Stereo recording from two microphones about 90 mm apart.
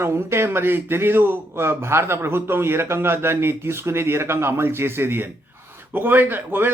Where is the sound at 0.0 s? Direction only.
30° right (ahead or behind).